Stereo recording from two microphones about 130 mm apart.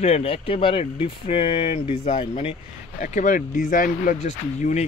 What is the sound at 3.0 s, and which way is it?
Speech, 75° left (ahead or behind).